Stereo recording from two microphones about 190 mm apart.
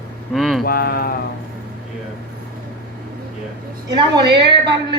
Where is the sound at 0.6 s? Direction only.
50° left (ahead or behind).